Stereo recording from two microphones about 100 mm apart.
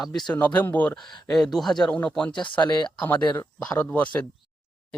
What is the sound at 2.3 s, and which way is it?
Speech, 50° left (ahead or behind).